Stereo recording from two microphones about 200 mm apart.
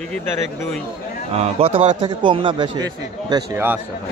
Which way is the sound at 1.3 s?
30° right (ahead or behind).